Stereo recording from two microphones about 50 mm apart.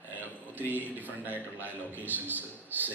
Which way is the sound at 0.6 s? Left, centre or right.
Right.